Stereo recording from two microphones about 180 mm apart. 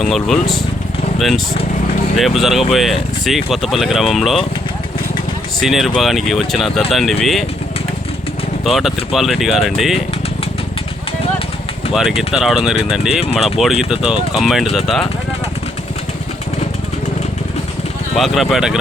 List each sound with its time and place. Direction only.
0.0 s speech: centre (ahead or behind)
2.1 s speech: centre (ahead or behind)
5.5 s speech: centre (ahead or behind)
8.6 s speech: centre (ahead or behind)
11.9 s speech: 5° right (ahead or behind)
13.2 s speech: 35° left (ahead or behind)
13.6 s speech: centre (ahead or behind)
18.2 s speech: centre (ahead or behind)